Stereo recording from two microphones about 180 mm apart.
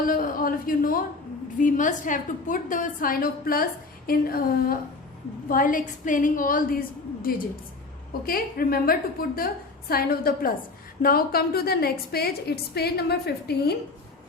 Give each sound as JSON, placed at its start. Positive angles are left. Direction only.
{"t": 0.0, "sound": "a woman's voice", "side_deg": 50}